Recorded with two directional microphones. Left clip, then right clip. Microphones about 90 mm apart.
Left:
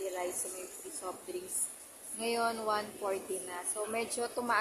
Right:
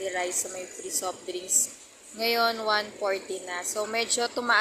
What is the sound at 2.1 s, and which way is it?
A woman's voice, 20° right (ahead or behind).